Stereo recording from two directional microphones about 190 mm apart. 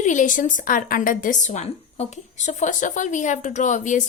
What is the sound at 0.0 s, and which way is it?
A woman's voice, 40° left (ahead or behind).